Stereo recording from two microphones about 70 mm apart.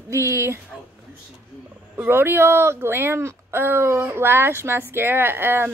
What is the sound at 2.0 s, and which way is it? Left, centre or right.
A woman's voice, right.